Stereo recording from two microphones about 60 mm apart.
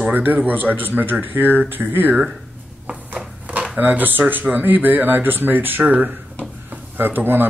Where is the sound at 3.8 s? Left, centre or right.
Right.